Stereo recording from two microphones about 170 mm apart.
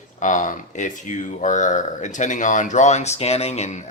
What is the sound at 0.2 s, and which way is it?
Speech, 50° left (ahead or behind).